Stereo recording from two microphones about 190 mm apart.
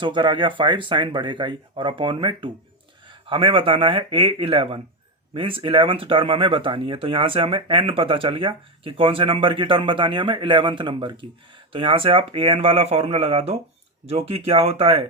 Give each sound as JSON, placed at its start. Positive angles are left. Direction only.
{"t": 0.0, "sound": "speech", "side_deg": -25}